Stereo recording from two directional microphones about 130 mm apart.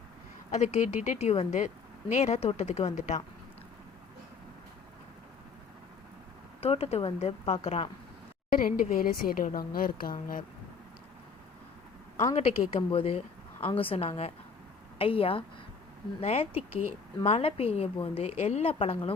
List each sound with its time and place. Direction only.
0.5 s speech: 60° left (ahead or behind)
6.6 s a woman's voice: 50° left (ahead or behind)
8.6 s a woman's voice: 90° left
12.3 s a woman's voice: 50° left (ahead or behind)